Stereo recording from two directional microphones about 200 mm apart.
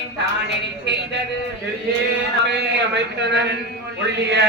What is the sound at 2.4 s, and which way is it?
A man's voice, 60° right (ahead or behind).